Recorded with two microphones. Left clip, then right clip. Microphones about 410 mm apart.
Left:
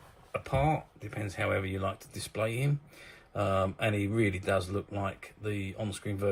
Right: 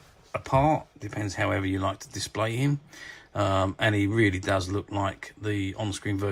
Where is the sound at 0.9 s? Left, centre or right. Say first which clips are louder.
Right 6 dB; centre.